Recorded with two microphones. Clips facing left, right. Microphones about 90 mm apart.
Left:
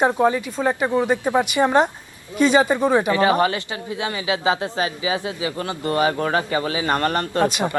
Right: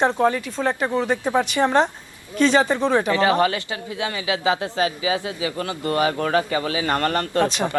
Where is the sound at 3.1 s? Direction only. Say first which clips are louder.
Left 1 dB; 30° left (ahead or behind).